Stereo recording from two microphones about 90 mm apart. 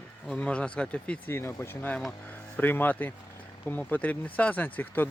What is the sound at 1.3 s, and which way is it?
Speech, 30° left (ahead or behind).